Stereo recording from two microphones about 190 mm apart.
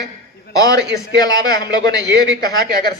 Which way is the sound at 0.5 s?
20° left (ahead or behind).